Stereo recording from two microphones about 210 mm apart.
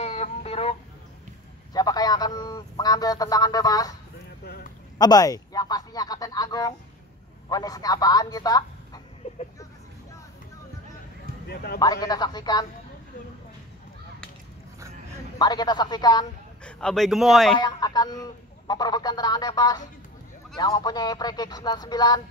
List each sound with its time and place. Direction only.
0.0 s a sound: 30° left (ahead or behind)
1.7 s a sound: 20° left (ahead or behind)
4.9 s a sound: 20° left (ahead or behind)
7.4 s a man's voice: 15° left (ahead or behind)
9.2 s vehicle: 25° left (ahead or behind)
11.4 s speech: 50° left (ahead or behind)
11.8 s speech: 20° left (ahead or behind)
15.3 s speech: 20° left (ahead or behind)
16.6 s a man's voice: 5° left (ahead or behind)
17.6 s speech: 20° left (ahead or behind)